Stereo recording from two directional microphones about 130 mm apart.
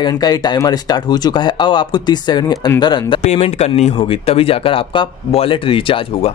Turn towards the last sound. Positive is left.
turn(degrees=45)  # may be behind; listen again after turning